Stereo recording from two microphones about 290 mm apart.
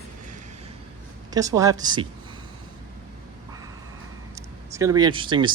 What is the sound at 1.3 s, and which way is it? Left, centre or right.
Speech, centre.